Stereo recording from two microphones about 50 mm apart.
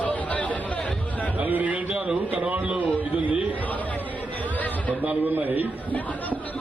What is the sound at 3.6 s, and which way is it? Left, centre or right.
Chatter, left.